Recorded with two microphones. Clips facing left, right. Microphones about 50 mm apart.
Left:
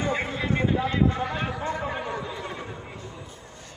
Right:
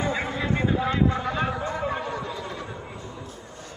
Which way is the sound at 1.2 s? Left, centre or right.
Centre.